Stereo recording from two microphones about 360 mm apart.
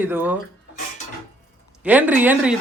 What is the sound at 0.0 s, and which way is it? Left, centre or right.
Speech, centre.